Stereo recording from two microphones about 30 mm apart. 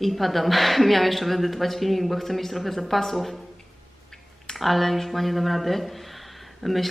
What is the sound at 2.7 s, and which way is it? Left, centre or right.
Speech, centre.